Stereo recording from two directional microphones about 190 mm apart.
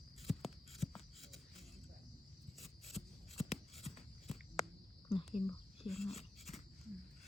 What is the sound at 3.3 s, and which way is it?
Writing, 35° left (ahead or behind).